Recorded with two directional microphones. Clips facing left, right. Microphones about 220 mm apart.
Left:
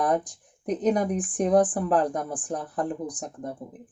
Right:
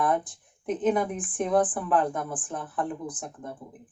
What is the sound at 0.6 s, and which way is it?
Speech, 40° left (ahead or behind).